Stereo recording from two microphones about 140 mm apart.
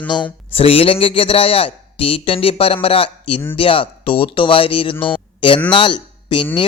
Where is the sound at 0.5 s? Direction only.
40° left (ahead or behind).